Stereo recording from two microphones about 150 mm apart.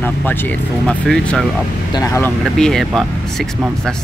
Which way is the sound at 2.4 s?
5° left (ahead or behind).